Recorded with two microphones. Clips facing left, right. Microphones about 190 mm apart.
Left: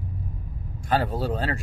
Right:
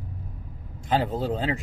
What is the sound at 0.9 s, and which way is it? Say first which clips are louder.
Speech: even; 20° right (ahead or behind).